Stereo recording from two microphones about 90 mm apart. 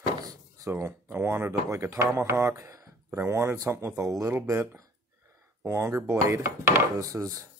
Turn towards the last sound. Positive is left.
turn(degrees=-40)  # may be behind; listen again after turning